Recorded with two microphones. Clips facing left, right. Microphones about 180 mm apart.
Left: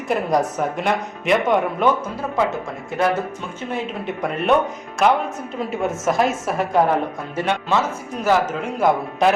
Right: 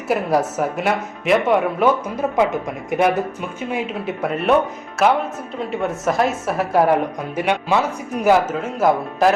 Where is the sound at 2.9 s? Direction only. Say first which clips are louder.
Right 3 dB; 20° right (ahead or behind).